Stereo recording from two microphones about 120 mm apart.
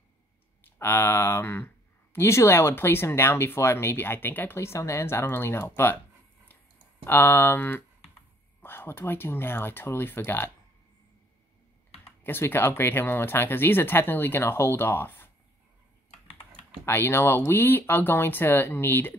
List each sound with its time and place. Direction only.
0.7 s speech: 20° left (ahead or behind)
7.1 s speech: 15° left (ahead or behind)
12.2 s speech: 15° left (ahead or behind)
16.8 s speech: 20° left (ahead or behind)